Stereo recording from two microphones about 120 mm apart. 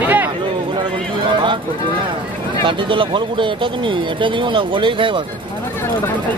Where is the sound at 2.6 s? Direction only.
45° right (ahead or behind).